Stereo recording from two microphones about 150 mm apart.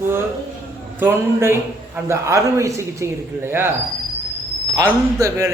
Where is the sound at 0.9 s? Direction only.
15° right (ahead or behind).